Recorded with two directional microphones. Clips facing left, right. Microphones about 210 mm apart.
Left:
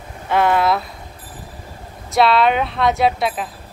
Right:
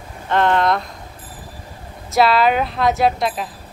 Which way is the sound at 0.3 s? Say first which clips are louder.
Even; 10° left (ahead or behind).